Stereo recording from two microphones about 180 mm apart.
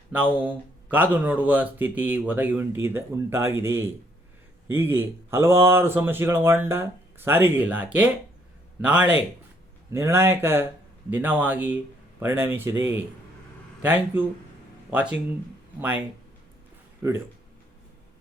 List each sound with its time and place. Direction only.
0.1 s speech: 10° right (ahead or behind)
13.8 s speech: 10° right (ahead or behind)